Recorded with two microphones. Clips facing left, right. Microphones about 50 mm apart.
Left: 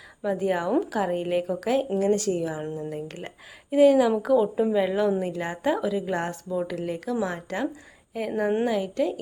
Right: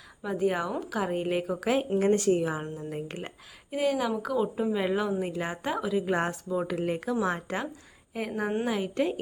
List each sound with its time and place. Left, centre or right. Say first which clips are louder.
0.2 s a woman's voice: left 3 dB; centre
2.0 s a woman's voice: even; right
3.1 s speech: even; centre
3.7 s a woman's voice: left 10 dB; centre
6.0 s speech: even; centre
9.0 s a woman's voice: left 2 dB; right